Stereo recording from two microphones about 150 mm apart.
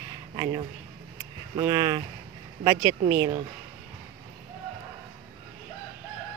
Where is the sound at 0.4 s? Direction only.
30° right (ahead or behind).